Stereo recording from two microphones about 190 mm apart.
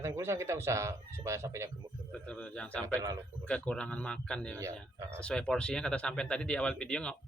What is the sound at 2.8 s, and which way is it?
Speech, 15° right (ahead or behind).